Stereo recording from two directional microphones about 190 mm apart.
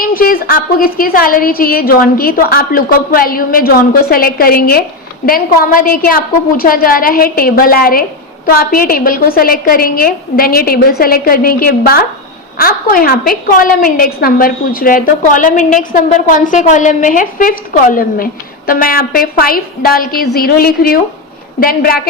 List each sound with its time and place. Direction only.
0.0 s a woman's voice: 50° left (ahead or behind)